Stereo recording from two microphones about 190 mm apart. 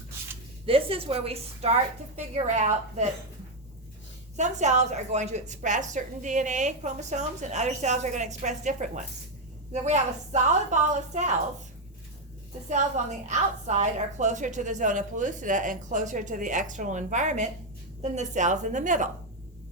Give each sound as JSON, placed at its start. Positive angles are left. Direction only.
{"t": 0.6, "sound": "a woman's voice", "side_deg": -30}
{"t": 4.4, "sound": "a woman's voice", "side_deg": -40}
{"t": 12.6, "sound": "a woman's voice", "side_deg": -40}